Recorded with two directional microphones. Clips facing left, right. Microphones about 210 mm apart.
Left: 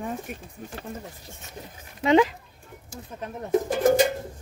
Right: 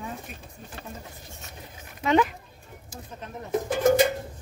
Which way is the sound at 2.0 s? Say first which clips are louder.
Left 3 dB; 20° left (ahead or behind).